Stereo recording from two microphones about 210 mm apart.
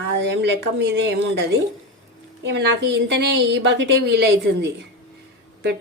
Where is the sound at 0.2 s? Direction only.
55° right (ahead or behind).